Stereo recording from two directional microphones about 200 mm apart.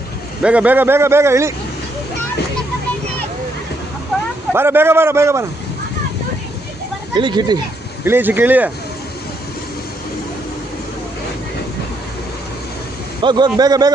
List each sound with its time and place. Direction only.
0.4 s a man's voice: 5° right (ahead or behind)
4.5 s a man's voice: 10° right (ahead or behind)
7.2 s a man's voice: 20° right (ahead or behind)
8.0 s a man's voice: 10° right (ahead or behind)
13.2 s a man's voice: 20° right (ahead or behind)